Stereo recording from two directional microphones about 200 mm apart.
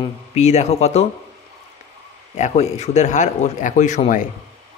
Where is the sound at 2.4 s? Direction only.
35° left (ahead or behind).